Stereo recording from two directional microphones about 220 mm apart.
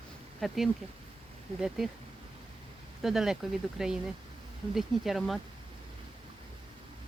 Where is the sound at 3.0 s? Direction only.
Centre (ahead or behind).